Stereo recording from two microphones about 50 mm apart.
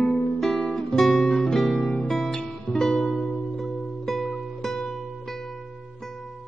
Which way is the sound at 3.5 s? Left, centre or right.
Centre.